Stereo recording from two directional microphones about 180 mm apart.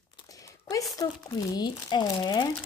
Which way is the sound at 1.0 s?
20° left (ahead or behind).